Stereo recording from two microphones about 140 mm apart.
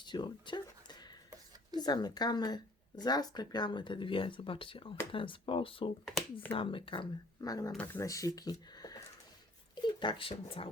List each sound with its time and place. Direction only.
0.0 s a sound: 35° left (ahead or behind)
1.7 s speech: 30° left (ahead or behind)
7.7 s speech: 10° left (ahead or behind)
8.0 s speech: 25° left (ahead or behind)
8.7 s a sound: 25° left (ahead or behind)
9.8 s speech: 35° left (ahead or behind)